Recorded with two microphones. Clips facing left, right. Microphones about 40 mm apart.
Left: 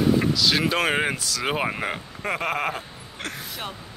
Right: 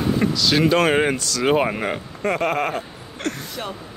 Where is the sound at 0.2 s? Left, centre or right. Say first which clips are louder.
Right 3 dB; centre.